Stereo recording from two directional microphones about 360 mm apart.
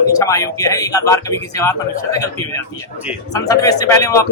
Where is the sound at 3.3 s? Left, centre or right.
Centre.